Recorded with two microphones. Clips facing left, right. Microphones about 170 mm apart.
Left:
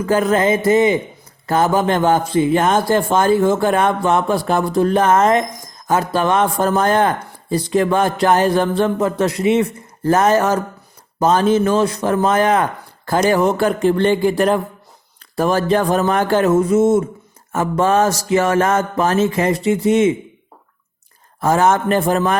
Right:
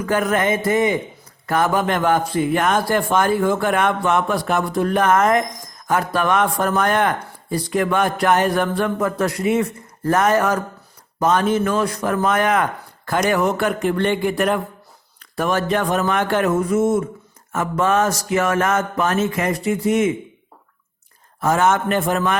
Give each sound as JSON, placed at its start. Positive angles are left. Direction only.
{"t": 0.0, "sound": "speech", "side_deg": 25}
{"t": 21.4, "sound": "speech", "side_deg": 35}